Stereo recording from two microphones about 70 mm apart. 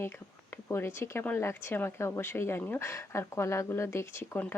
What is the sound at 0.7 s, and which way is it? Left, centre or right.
Speech, left.